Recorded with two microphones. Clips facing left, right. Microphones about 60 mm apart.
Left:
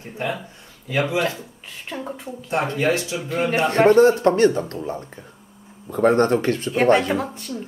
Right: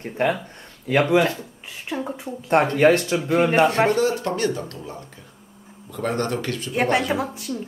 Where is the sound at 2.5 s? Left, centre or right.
Right.